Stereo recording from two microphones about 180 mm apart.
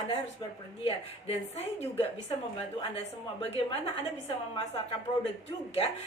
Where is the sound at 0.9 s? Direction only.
35° left (ahead or behind).